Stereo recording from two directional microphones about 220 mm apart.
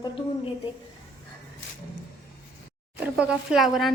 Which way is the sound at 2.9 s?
5° right (ahead or behind).